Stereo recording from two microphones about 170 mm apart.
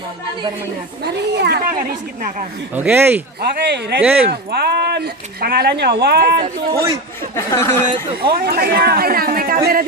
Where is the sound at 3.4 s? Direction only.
75° right (ahead or behind).